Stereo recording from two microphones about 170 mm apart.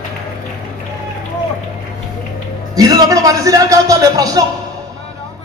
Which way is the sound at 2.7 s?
20° right (ahead or behind).